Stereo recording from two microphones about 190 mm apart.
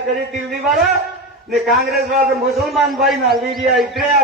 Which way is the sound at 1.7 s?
55° right (ahead or behind).